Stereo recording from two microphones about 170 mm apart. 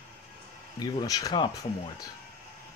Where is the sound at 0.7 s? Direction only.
20° left (ahead or behind).